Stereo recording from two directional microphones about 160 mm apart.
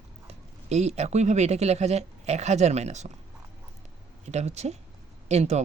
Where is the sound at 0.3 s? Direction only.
45° right (ahead or behind).